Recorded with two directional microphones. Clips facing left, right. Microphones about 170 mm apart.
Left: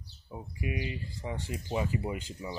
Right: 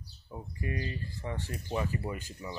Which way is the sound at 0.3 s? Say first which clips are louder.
Left 1 dB; 10° left (ahead or behind).